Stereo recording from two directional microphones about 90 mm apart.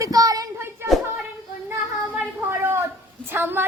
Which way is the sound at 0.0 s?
45° right (ahead or behind).